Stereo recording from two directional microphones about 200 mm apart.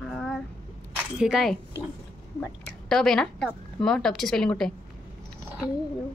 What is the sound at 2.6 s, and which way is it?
A woman's voice, centre (ahead or behind).